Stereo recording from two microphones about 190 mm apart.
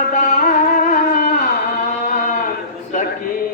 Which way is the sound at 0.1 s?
45° left (ahead or behind).